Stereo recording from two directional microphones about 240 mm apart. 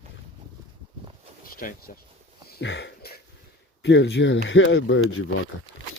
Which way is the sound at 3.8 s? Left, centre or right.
Left.